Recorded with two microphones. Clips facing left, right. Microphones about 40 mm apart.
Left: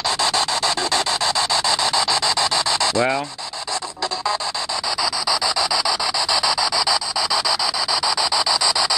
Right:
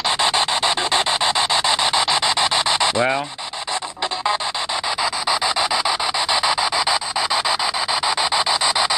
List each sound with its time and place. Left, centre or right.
0.2 s rub: right
5.0 s rub: right